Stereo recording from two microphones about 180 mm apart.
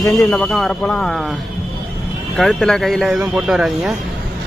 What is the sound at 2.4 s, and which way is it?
Speech, centre (ahead or behind).